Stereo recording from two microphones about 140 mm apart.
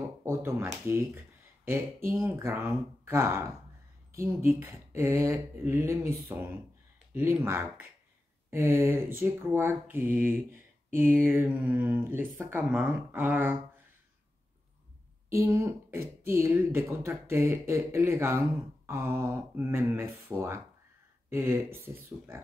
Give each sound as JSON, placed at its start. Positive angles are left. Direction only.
{"t": 0.2, "sound": "speech", "side_deg": -20}
{"t": 15.2, "sound": "speech", "side_deg": -20}